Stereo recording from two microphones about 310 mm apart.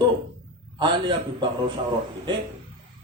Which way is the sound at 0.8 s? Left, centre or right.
Centre.